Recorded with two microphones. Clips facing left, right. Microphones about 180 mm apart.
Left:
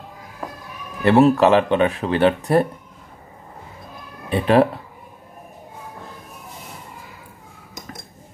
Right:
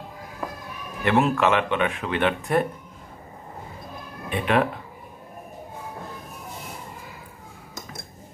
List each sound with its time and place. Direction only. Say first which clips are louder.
1.0 s speech: left 7 dB; 35° left (ahead or behind)
4.3 s speech: left 7 dB; 35° left (ahead or behind)